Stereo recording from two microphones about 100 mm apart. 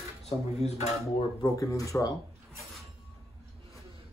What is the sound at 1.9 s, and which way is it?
Speech, 35° left (ahead or behind).